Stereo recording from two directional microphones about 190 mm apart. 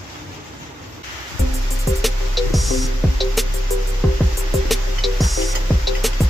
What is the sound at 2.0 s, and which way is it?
Music, centre (ahead or behind).